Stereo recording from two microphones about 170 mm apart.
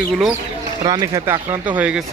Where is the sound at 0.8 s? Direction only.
25° right (ahead or behind).